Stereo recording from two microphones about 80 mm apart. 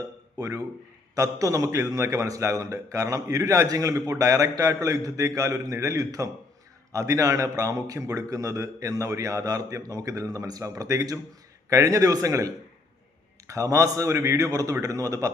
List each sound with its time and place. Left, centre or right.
0.3 s a man's voice: right